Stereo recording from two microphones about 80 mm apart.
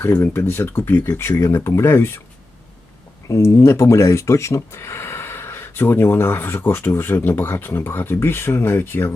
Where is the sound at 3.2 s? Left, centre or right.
Left.